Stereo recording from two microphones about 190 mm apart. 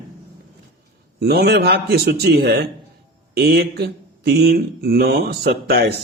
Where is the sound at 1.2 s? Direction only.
55° right (ahead or behind).